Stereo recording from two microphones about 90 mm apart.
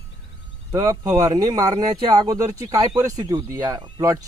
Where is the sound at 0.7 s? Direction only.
35° right (ahead or behind).